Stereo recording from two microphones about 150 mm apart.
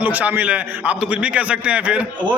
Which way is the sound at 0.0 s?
10° right (ahead or behind).